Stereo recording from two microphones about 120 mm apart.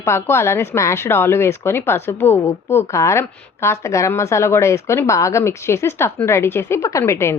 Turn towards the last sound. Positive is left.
turn(degrees=20)  # may be behind; listen again after turning